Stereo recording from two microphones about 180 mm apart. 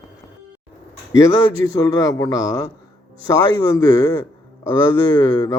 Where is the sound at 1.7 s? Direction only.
20° left (ahead or behind).